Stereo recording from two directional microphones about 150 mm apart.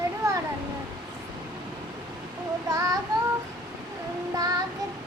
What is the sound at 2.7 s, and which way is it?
Child singing, 25° right (ahead or behind).